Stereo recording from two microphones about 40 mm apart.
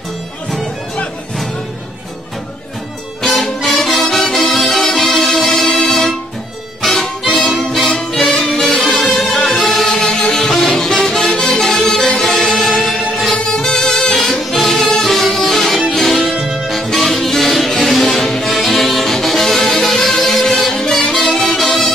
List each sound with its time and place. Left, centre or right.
3.2 s music: centre
6.8 s harmonica: centre
7.2 s music: centre
10.0 s music: left
10.3 s music: centre
13.3 s music: centre
15.0 s music: centre